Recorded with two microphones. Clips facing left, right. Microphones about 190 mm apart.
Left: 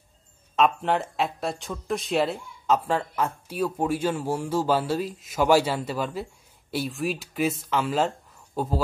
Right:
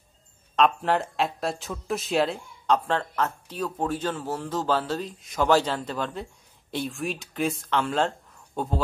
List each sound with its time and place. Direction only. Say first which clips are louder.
0.6 s speech: even; centre (ahead or behind)